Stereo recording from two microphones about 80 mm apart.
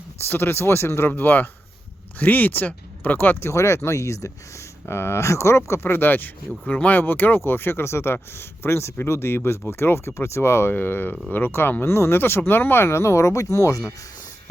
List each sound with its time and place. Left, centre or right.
0.3 s speech: left
3.5 s speech: left